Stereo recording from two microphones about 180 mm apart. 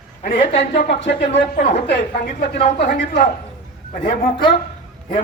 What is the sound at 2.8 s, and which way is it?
Speech, 75° left (ahead or behind).